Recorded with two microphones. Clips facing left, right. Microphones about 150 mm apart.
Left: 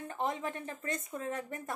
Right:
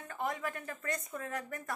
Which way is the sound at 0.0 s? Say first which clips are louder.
Left 2 dB; 25° left (ahead or behind).